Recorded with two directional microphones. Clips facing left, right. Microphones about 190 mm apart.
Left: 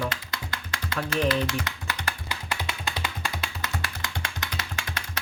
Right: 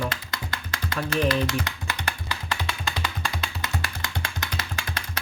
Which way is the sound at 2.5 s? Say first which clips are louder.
Right 1 dB; 15° left (ahead or behind).